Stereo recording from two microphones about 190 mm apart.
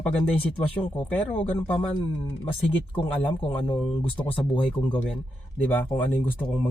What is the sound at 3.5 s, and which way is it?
Speech, 30° left (ahead or behind).